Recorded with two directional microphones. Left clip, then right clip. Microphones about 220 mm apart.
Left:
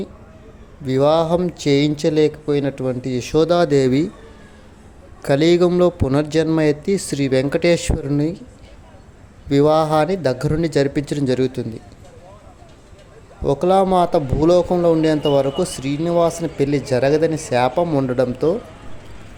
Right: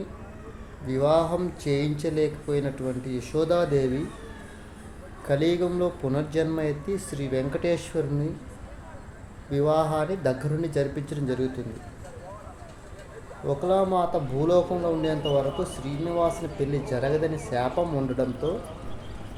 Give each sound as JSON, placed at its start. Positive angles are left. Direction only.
{"t": 0.9, "sound": "speech", "side_deg": 40}
{"t": 5.2, "sound": "speech", "side_deg": 45}
{"t": 9.5, "sound": "speech", "side_deg": 45}
{"t": 13.4, "sound": "speech", "side_deg": 45}